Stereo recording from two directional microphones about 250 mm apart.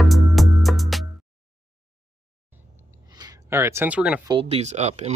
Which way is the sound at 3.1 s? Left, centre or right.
Centre.